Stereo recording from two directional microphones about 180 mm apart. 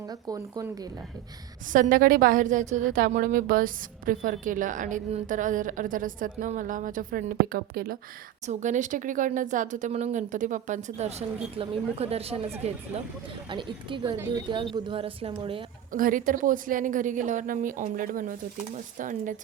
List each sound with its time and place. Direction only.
0.1 s a woman's voice: 20° right (ahead or behind)
1.7 s a woman's voice: 50° right (ahead or behind)
8.4 s a woman's voice: 40° right (ahead or behind)
15.9 s a woman's voice: 50° right (ahead or behind)